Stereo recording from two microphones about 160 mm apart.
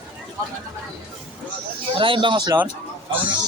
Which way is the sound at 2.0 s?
30° right (ahead or behind).